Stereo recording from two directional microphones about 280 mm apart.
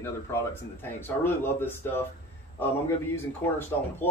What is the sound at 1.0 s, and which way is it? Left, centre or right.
Speech, centre.